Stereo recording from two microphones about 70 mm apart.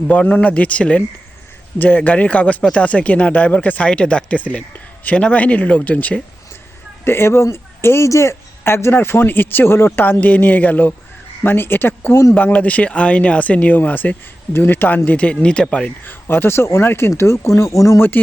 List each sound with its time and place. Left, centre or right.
0.3 s speech: left
7.0 s speech: left; by 15.9 s centre
16.0 s speech: left